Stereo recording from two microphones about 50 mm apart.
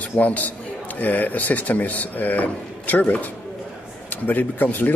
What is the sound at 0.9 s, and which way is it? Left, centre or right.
Speech, left.